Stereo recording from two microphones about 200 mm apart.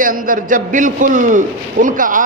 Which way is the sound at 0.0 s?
45° right (ahead or behind).